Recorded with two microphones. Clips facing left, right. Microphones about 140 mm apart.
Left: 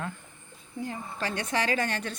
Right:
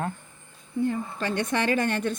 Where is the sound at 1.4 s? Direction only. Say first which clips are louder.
Right 3 dB; 55° right (ahead or behind).